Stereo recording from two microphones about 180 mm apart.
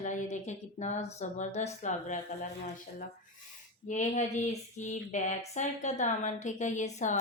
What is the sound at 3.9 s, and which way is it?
A woman's voice, 40° left (ahead or behind).